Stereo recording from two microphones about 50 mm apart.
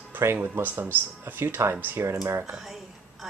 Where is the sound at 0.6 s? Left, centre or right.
Right.